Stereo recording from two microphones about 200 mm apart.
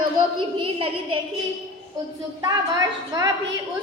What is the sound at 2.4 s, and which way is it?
Speech, 15° right (ahead or behind).